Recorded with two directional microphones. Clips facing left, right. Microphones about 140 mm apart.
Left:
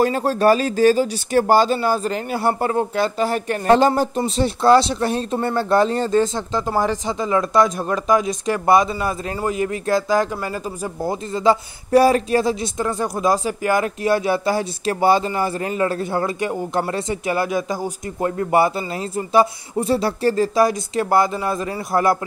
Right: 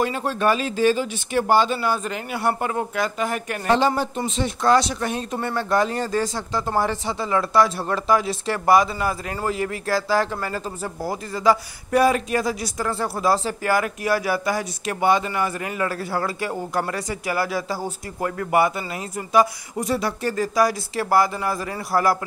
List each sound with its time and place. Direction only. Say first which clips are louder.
0.0 s speech: left 5 dB; 40° left (ahead or behind)
3.7 s speech: left 5 dB; 45° left (ahead or behind)
4.2 s speech: left 5 dB; 30° left (ahead or behind)
18.4 s speech: left 2 dB; 30° left (ahead or behind)